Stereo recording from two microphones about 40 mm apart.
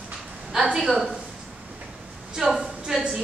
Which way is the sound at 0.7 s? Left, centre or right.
Centre.